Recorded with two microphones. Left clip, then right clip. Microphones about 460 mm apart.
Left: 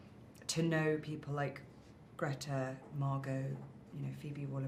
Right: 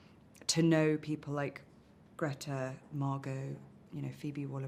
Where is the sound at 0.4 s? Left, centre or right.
Right.